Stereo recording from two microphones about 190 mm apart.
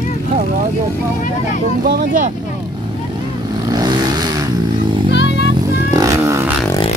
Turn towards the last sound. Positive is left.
turn(degrees=-15)  # may be behind; listen again after turning